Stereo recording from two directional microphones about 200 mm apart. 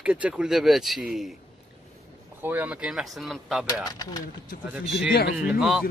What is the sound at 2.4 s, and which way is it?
Speech, 10° right (ahead or behind).